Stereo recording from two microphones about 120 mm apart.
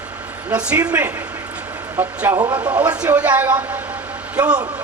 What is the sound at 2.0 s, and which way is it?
Speech, 20° right (ahead or behind).